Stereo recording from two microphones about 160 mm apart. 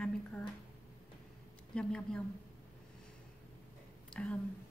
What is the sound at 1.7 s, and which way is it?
Speech, 5° left (ahead or behind).